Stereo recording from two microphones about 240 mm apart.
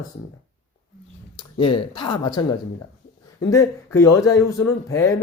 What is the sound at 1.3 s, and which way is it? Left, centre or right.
Speech, left.